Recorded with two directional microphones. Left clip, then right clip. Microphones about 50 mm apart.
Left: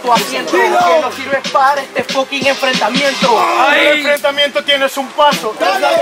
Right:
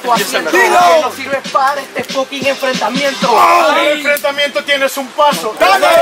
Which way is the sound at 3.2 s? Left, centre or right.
Left.